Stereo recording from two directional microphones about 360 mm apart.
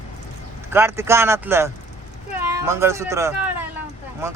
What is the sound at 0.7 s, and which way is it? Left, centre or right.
Speech, centre.